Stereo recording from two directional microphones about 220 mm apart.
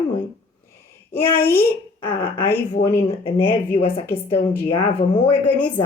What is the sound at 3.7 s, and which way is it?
Speech, 25° left (ahead or behind).